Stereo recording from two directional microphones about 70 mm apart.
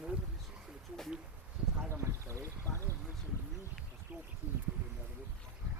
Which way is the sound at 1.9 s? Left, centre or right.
Right.